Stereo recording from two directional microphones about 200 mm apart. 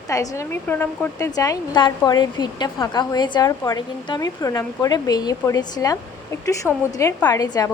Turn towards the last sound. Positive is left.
turn(degrees=20)  # may be behind; listen again after turning